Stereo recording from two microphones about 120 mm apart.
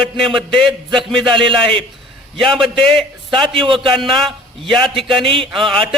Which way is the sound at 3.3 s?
45° right (ahead or behind).